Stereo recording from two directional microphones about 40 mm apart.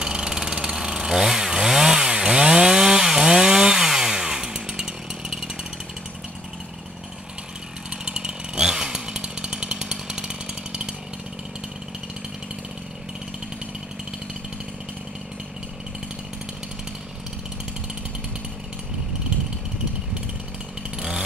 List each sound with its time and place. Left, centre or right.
0.0 s chainsaw: centre
8.0 s chainsaw: centre